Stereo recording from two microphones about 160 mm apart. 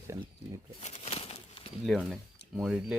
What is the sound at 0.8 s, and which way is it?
Bird, 40° left (ahead or behind).